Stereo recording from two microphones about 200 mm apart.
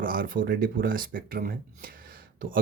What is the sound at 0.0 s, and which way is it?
Speech, 45° right (ahead or behind).